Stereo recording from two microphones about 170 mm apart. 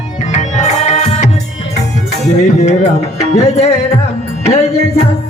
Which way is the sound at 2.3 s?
45° left (ahead or behind).